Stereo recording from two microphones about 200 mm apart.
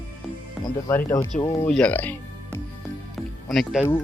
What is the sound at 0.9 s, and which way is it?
Speech, 10° left (ahead or behind).